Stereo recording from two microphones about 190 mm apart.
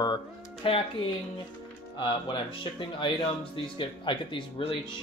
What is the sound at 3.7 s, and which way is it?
Speech, 25° left (ahead or behind).